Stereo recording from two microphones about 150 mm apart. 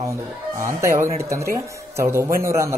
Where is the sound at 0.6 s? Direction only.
20° right (ahead or behind).